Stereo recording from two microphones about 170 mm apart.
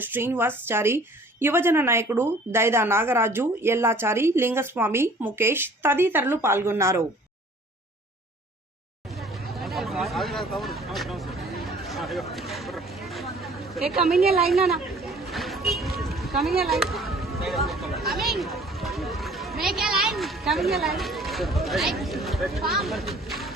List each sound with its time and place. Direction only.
0.0 s a woman's voice: 10° right (ahead or behind)
9.1 s hubbub: centre (ahead or behind)
13.9 s a woman's voice: centre (ahead or behind)
14.2 s a woman's voice: 60° right (ahead or behind)
14.5 s a sound: centre (ahead or behind)
16.6 s speech: centre (ahead or behind)